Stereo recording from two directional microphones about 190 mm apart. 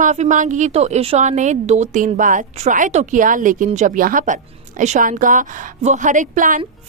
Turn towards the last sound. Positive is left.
turn(degrees=-45)  # may be behind; listen again after turning